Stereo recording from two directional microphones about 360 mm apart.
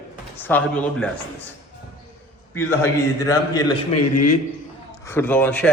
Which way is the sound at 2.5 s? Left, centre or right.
Centre.